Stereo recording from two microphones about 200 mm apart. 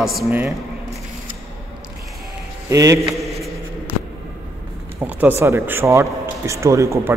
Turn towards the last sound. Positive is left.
turn(degrees=-15)  # may be behind; listen again after turning